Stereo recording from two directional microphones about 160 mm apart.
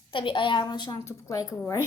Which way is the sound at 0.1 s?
30° left (ahead or behind).